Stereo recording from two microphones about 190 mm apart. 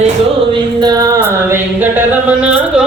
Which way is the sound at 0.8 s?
20° right (ahead or behind).